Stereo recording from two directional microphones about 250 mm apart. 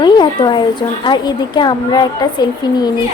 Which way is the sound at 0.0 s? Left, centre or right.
Centre.